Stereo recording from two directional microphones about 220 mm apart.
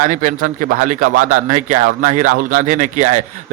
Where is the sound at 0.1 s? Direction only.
40° right (ahead or behind).